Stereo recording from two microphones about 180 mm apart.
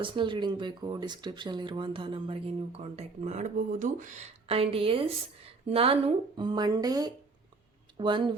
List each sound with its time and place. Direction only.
0.0 s speech: 25° right (ahead or behind)